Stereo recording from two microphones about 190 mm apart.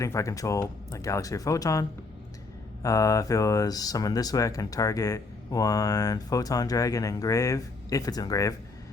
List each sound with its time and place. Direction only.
0.0 s speech: 15° left (ahead or behind)